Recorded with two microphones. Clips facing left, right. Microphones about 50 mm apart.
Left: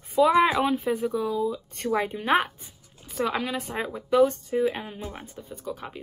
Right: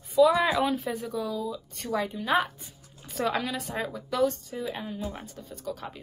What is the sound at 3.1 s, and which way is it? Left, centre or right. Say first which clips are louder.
Speech: left 1 dB; centre.